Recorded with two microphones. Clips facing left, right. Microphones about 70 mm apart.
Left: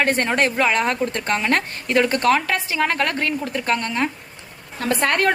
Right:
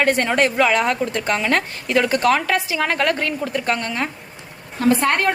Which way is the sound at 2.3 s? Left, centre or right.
Right.